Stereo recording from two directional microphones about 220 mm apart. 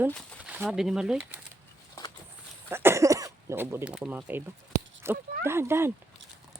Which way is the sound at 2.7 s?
10° right (ahead or behind).